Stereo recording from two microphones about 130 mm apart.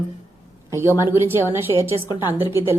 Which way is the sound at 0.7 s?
20° right (ahead or behind).